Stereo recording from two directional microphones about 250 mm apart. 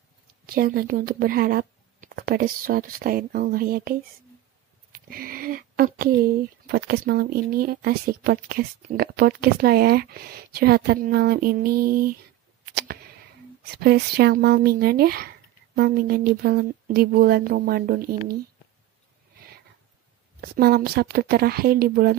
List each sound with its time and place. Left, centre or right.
0.5 s speech: right
4.9 s a sound: right
6.7 s speech: right
12.7 s a sound: right
13.7 s speech: right
20.3 s speech: right